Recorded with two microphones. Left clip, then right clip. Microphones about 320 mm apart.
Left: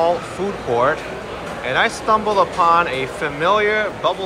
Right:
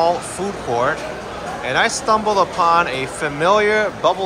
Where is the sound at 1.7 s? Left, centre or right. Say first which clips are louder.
Even; centre.